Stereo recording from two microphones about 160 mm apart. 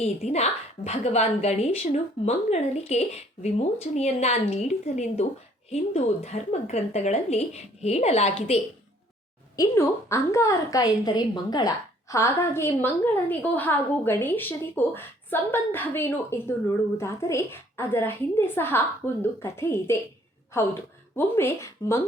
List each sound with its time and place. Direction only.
0.3 s a woman's voice: 40° left (ahead or behind)
9.6 s a woman's voice: 15° left (ahead or behind)